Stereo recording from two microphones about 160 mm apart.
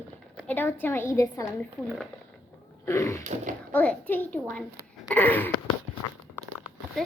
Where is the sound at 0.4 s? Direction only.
15° left (ahead or behind).